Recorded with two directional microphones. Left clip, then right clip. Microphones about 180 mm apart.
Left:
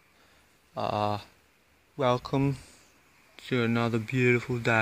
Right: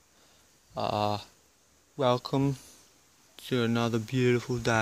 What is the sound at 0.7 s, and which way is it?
Speech, 10° right (ahead or behind).